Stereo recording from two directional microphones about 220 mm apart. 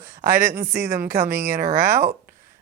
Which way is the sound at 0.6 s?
40° right (ahead or behind).